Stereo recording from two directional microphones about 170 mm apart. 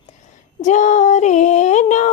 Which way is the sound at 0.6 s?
45° left (ahead or behind).